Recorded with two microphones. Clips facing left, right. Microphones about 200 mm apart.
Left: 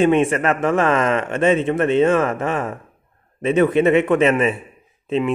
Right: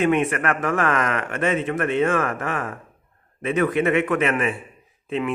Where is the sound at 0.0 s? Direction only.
25° left (ahead or behind).